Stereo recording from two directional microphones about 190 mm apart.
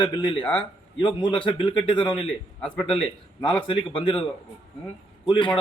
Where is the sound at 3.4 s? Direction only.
25° left (ahead or behind).